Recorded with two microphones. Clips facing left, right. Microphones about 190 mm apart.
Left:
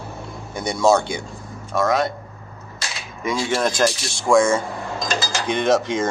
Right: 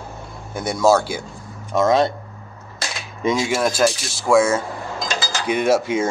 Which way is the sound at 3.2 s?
20° right (ahead or behind).